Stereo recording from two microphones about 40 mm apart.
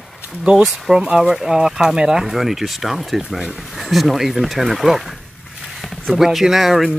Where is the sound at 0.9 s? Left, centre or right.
Right.